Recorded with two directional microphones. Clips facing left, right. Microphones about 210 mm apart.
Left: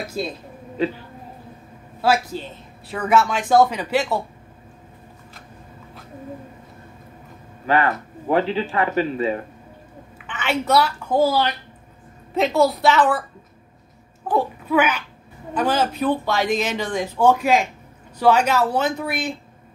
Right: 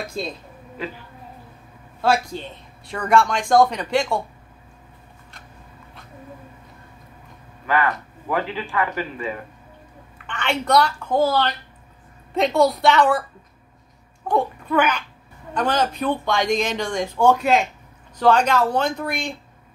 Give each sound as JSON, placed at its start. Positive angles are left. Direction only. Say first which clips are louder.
{"t": 0.2, "sound": "speech", "louder": "left 2 dB", "side_deg": 5}
{"t": 2.0, "sound": "speech", "louder": "left 1 dB", "side_deg": 5}
{"t": 7.6, "sound": "speech", "louder": "left 2 dB", "side_deg": 30}
{"t": 10.1, "sound": "a woman's voice", "louder": "left 1 dB", "side_deg": 5}
{"t": 14.2, "sound": "a woman's voice", "louder": "even", "side_deg": 5}